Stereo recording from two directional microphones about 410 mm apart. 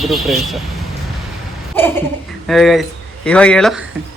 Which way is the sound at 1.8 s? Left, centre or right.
Centre.